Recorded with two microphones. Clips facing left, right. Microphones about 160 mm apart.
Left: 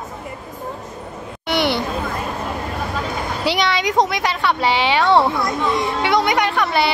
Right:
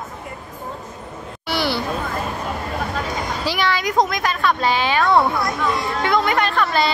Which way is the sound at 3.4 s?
75° left (ahead or behind).